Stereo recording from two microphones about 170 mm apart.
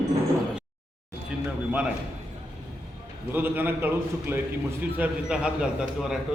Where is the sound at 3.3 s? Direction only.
10° right (ahead or behind).